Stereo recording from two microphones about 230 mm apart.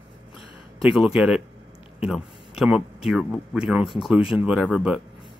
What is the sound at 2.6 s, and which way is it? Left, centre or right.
Speech, centre.